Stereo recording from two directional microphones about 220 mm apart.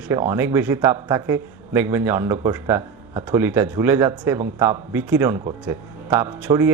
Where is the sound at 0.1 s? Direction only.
10° right (ahead or behind).